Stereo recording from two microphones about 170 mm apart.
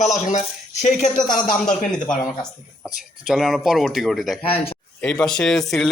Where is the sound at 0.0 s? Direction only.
45° left (ahead or behind).